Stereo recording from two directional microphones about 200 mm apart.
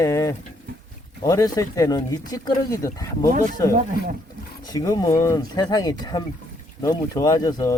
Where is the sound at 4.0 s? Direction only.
50° left (ahead or behind).